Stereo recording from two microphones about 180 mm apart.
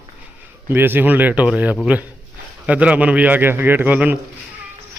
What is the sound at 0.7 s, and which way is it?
A man's voice, 10° right (ahead or behind).